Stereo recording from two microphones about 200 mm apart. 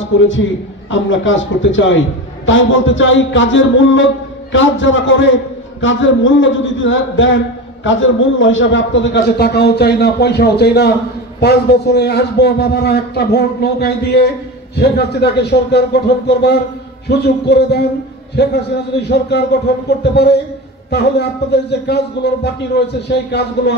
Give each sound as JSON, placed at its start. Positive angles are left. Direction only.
{"t": 0.0, "sound": "a man's voice", "side_deg": 70}